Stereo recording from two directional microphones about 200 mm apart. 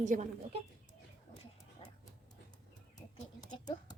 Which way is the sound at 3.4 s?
20° left (ahead or behind).